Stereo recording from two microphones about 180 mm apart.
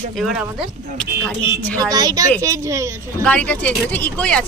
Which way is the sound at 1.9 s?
20° right (ahead or behind).